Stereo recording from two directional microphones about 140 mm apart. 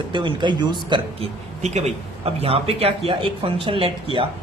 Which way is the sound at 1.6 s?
50° right (ahead or behind).